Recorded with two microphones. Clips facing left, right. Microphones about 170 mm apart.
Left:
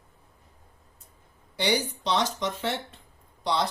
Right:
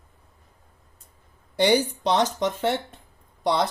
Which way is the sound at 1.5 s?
50° right (ahead or behind).